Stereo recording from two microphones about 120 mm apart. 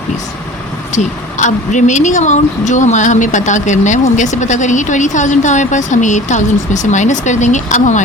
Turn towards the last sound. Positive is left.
turn(degrees=85)